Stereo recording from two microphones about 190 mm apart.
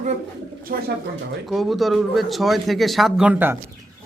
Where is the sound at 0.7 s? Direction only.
50° right (ahead or behind).